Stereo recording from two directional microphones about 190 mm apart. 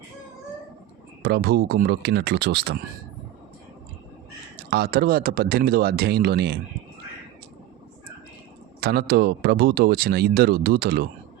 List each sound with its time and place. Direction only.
1.2 s speech: 55° right (ahead or behind)
4.7 s speech: 55° right (ahead or behind)
8.8 s speech: 55° right (ahead or behind)